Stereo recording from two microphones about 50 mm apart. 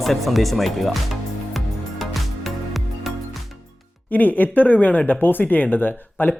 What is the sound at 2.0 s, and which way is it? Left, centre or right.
Music, centre.